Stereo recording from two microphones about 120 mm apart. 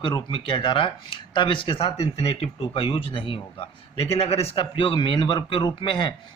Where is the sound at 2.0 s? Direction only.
60° left (ahead or behind).